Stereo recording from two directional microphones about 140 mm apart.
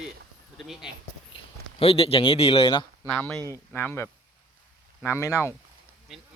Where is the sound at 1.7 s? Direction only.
40° left (ahead or behind).